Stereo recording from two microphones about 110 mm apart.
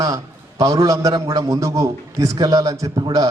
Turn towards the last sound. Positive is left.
turn(degrees=-35)  # may be behind; listen again after turning